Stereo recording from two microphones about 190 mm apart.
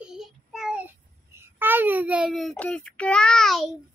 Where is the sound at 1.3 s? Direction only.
10° right (ahead or behind).